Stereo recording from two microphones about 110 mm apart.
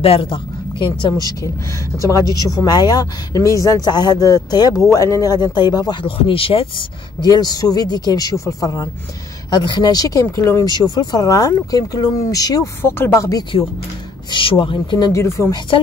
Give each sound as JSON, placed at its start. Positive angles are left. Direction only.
{"t": 0.0, "sound": "speech", "side_deg": 55}
{"t": 6.0, "sound": "speech", "side_deg": 55}
{"t": 7.2, "sound": "speech", "side_deg": 35}
{"t": 10.7, "sound": "speech", "side_deg": 40}
{"t": 12.8, "sound": "speech", "side_deg": 20}
{"t": 13.4, "sound": "speech", "side_deg": 50}
{"t": 15.1, "sound": "speech", "side_deg": 25}
{"t": 15.7, "sound": "speech", "side_deg": 55}